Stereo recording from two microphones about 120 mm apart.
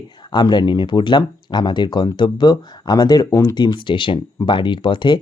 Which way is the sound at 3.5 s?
40° left (ahead or behind).